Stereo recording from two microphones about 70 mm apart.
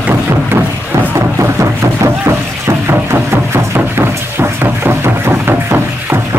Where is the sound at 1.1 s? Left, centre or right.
Right.